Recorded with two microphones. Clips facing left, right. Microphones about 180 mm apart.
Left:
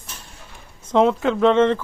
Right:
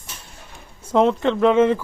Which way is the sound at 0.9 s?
Centre (ahead or behind).